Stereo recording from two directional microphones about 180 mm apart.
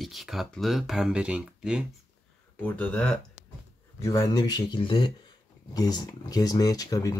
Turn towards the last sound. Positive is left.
turn(degrees=20)  # may be behind; listen again after turning